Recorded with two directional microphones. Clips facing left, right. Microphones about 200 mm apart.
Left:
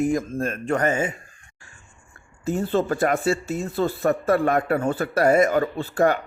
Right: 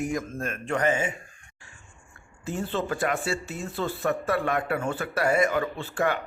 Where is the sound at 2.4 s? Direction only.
40° left (ahead or behind).